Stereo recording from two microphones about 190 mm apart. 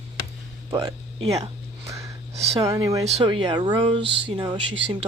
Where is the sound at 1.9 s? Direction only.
15° right (ahead or behind).